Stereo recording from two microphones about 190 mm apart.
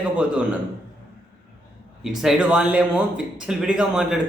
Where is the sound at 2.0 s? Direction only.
Centre (ahead or behind).